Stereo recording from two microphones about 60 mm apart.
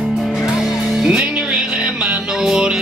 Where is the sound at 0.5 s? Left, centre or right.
Centre.